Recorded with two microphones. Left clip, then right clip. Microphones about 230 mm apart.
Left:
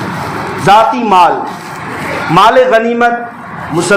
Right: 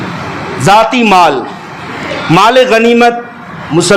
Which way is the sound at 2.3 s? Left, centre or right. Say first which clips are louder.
Even; right.